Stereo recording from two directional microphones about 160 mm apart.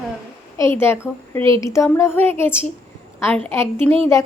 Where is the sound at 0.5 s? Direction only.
15° left (ahead or behind).